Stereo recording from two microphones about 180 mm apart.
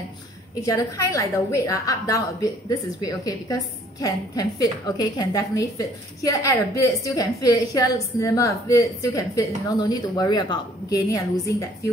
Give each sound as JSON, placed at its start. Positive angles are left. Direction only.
{"t": 0.7, "sound": "a woman's voice", "side_deg": 15}